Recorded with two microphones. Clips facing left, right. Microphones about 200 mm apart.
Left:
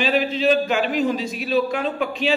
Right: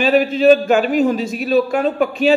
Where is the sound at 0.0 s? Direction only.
50° right (ahead or behind).